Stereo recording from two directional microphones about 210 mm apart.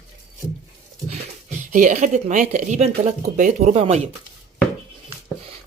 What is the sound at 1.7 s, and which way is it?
Speech, 35° right (ahead or behind).